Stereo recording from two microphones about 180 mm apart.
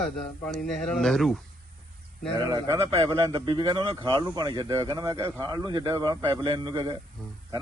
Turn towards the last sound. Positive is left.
turn(degrees=0)  # may be behind; listen again after turning